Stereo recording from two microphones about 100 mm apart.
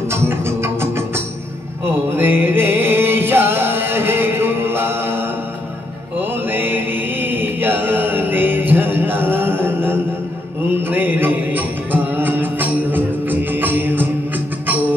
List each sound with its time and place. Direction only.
0.1 s music: 25° right (ahead or behind)
2.1 s chant: 20° right (ahead or behind)
6.1 s mantra: 20° right (ahead or behind)
10.9 s music: 20° right (ahead or behind)